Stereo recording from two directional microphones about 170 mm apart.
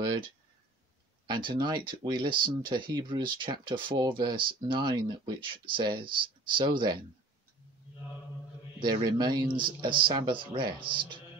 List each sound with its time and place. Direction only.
0.0 s speech: 25° right (ahead or behind)
8.7 s speech: 25° right (ahead or behind)